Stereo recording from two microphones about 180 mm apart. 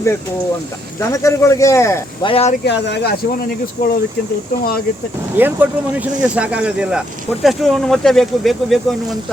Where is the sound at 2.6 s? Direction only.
75° left (ahead or behind).